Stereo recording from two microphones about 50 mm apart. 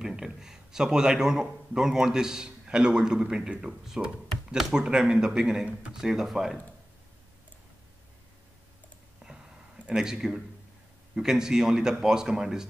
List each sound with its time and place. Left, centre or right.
0.0 s a man's voice: centre
9.2 s a sound: centre
9.9 s a man's voice: centre